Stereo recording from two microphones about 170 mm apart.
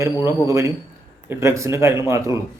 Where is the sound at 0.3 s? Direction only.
15° right (ahead or behind).